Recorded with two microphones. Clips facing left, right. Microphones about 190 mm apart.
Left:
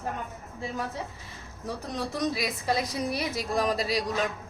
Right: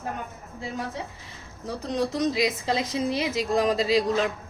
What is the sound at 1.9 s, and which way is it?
Speech, 20° right (ahead or behind).